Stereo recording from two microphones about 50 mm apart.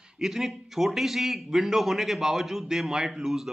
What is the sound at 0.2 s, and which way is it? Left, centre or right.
A man's voice, centre.